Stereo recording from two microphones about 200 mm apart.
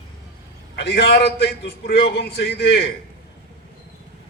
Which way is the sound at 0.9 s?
55° left (ahead or behind).